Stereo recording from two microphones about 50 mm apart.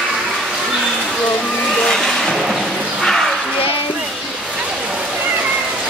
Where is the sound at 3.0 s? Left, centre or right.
Centre.